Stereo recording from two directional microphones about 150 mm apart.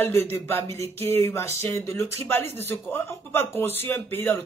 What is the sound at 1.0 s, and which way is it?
Speech, 15° left (ahead or behind).